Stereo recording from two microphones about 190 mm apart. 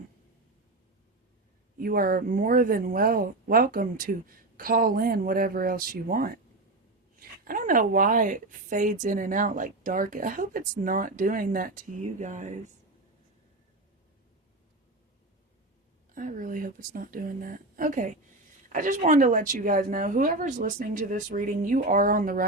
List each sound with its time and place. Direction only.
1.8 s a woman's voice: 50° right (ahead or behind)
7.4 s a woman's voice: 45° right (ahead or behind)
16.1 s a woman's voice: 45° right (ahead or behind)